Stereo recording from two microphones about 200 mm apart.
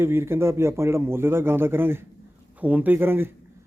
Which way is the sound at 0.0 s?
10° right (ahead or behind).